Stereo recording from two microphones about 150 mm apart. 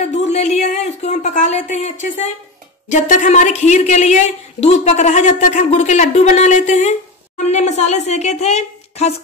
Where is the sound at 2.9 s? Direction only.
55° left (ahead or behind).